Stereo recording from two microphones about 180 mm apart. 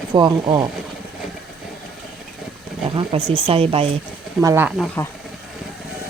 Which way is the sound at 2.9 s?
30° right (ahead or behind).